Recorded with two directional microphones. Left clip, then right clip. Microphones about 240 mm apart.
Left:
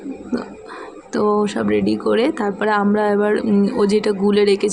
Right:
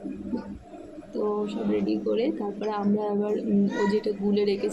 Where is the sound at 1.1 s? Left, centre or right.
Left.